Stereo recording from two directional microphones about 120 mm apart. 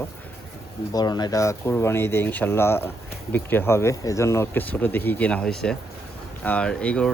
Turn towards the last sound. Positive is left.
turn(degrees=10)  # may be behind; listen again after turning